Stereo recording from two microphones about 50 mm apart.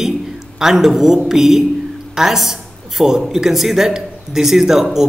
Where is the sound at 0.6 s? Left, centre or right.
Centre.